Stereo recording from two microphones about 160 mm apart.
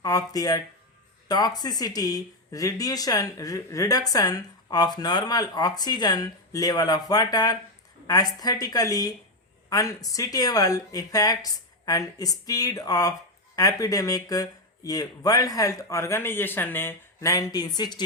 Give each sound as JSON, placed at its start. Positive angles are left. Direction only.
{"t": 0.0, "sound": "speech", "side_deg": 20}